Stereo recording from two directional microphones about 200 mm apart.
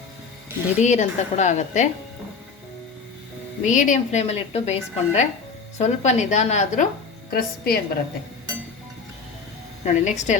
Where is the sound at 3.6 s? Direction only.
40° left (ahead or behind).